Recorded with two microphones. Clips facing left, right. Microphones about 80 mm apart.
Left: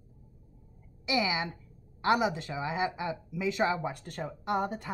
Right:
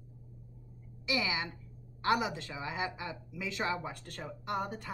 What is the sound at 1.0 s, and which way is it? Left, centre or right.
A woman's voice, centre.